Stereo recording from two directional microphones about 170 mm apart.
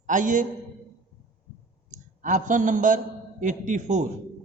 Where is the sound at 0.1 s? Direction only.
50° right (ahead or behind).